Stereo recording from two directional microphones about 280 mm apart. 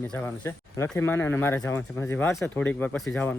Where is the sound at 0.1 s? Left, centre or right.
Centre.